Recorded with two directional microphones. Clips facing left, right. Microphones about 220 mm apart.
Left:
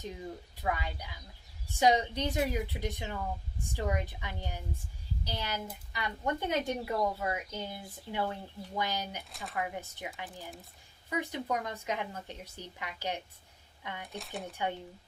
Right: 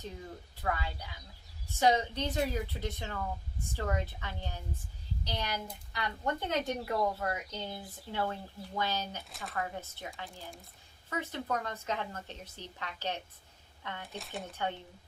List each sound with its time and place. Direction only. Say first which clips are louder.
0.6 s speech: left 1 dB; 15° left (ahead or behind)
9.3 s speech: even; centre (ahead or behind)
9.6 s speech: left 2 dB; 15° left (ahead or behind)
14.1 s speech: left 2 dB; centre (ahead or behind)